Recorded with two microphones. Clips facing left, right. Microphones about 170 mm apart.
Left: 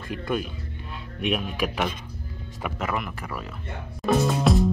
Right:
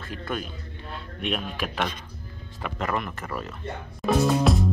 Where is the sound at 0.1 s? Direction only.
10° left (ahead or behind).